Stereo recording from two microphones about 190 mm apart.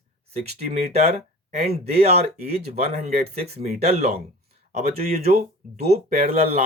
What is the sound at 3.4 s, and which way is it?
Speech, 55° right (ahead or behind).